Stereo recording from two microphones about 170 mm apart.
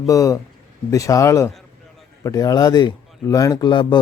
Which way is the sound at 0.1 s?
20° left (ahead or behind).